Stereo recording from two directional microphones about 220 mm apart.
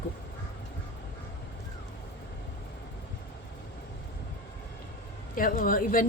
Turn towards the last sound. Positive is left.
turn(degrees=40)  # may be behind; listen again after turning